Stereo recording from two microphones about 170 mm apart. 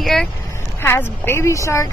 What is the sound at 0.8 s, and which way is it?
Speech, 15° left (ahead or behind).